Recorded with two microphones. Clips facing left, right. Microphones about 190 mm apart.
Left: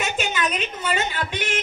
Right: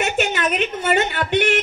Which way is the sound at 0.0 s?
65° right (ahead or behind).